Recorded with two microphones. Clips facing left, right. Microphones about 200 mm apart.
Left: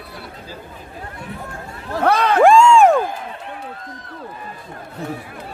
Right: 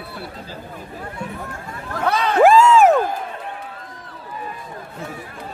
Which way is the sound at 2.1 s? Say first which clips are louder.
Left 4 dB; 60° left (ahead or behind).